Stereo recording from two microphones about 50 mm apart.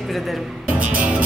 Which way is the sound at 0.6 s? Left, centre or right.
Right.